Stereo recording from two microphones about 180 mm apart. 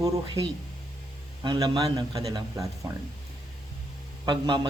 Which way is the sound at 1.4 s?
25° right (ahead or behind).